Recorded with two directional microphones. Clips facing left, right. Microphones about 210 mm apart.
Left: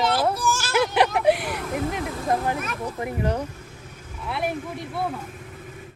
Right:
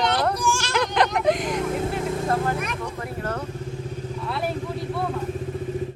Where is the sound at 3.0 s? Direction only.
15° left (ahead or behind).